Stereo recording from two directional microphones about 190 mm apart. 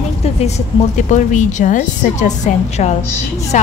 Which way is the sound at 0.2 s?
35° left (ahead or behind).